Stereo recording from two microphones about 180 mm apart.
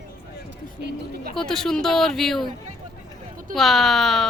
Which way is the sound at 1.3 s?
5° left (ahead or behind).